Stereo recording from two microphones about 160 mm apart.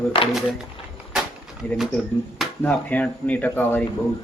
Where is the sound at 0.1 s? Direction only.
35° left (ahead or behind).